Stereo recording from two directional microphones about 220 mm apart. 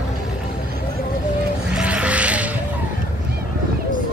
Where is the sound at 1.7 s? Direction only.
5° right (ahead or behind).